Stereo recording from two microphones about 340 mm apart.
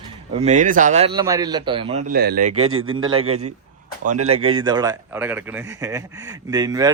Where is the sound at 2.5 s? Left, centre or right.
Right.